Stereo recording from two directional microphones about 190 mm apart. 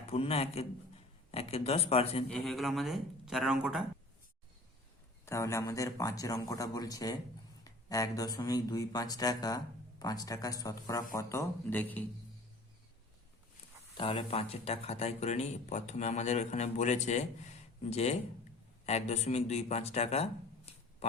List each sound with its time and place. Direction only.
0.1 s speech: 30° left (ahead or behind)
2.3 s speech: centre (ahead or behind)
5.2 s speech: 15° left (ahead or behind)
13.9 s speech: 30° left (ahead or behind)